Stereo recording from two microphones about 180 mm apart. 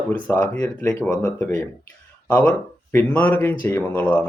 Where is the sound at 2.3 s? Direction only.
5° left (ahead or behind).